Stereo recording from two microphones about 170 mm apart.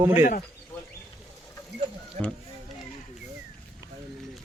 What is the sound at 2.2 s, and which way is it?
Speech, 40° right (ahead or behind).